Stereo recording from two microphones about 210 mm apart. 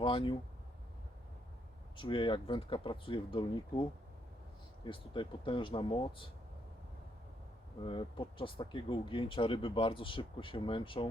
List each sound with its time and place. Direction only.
0.0 s speech: 25° left (ahead or behind)
2.0 s speech: 25° left (ahead or behind)
4.9 s speech: 25° left (ahead or behind)
7.9 s speech: 25° left (ahead or behind)